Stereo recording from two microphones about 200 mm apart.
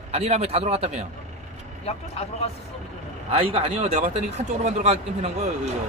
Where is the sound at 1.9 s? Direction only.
30° left (ahead or behind).